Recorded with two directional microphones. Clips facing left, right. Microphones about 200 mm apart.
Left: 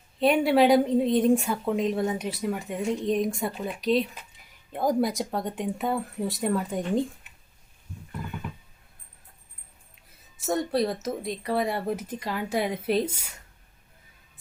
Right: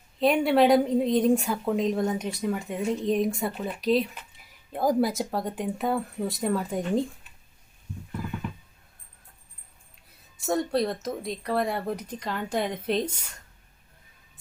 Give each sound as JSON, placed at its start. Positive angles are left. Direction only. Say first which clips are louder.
{"t": 0.2, "sound": "speech", "louder": "even", "side_deg": 0}
{"t": 10.3, "sound": "speech", "louder": "even", "side_deg": 0}